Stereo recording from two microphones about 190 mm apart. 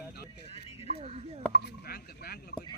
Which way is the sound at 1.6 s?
55° left (ahead or behind).